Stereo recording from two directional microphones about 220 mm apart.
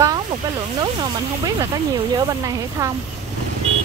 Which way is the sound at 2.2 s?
15° right (ahead or behind).